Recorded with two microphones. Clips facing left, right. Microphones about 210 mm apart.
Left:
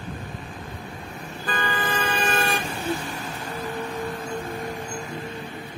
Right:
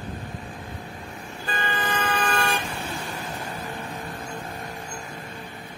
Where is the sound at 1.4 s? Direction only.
35° left (ahead or behind).